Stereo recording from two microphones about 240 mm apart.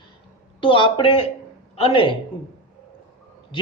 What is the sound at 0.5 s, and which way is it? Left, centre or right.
A man's voice, centre.